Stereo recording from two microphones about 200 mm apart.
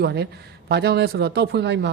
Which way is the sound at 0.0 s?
55° right (ahead or behind).